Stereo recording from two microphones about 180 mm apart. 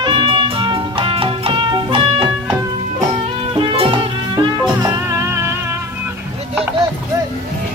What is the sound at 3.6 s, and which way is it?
Music, 30° right (ahead or behind).